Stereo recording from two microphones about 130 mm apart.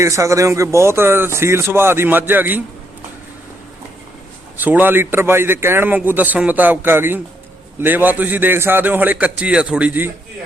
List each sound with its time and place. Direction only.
0.0 s speech: 20° right (ahead or behind)
4.6 s a man's voice: 15° right (ahead or behind)